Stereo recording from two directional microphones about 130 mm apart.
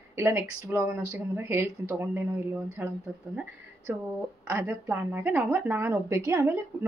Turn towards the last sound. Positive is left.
turn(degrees=-20)  # may be behind; listen again after turning